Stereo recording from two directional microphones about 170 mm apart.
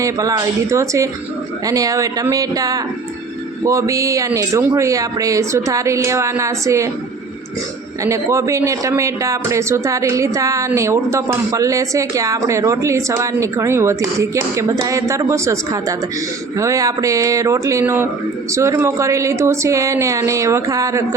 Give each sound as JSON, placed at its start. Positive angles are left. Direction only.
{"t": 0.0, "sound": "speech", "side_deg": -20}
{"t": 8.0, "sound": "speech", "side_deg": -15}